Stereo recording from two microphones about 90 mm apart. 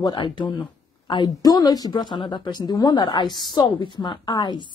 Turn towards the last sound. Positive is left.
turn(degrees=55)  # may be behind; listen again after turning